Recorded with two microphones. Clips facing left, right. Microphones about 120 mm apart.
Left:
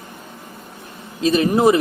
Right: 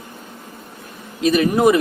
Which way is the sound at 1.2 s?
30° left (ahead or behind).